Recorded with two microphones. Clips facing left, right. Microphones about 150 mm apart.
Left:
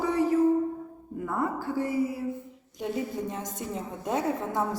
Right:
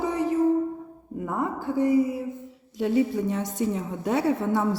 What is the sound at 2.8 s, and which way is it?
A woman's voice, 75° right (ahead or behind).